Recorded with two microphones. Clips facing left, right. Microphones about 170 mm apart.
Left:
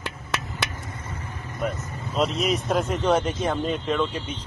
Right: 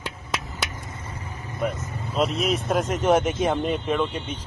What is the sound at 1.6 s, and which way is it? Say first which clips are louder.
Speech: right 1 dB; centre (ahead or behind).